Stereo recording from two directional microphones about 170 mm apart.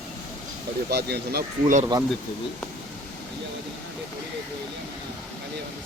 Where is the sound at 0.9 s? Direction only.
75° right (ahead or behind).